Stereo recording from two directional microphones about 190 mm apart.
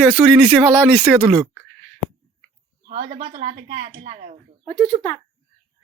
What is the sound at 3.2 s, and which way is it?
Speech, 40° right (ahead or behind).